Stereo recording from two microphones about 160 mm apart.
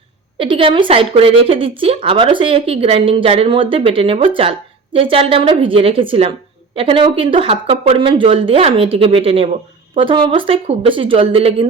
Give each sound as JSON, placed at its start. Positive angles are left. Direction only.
{"t": 0.3, "sound": "speech", "side_deg": -35}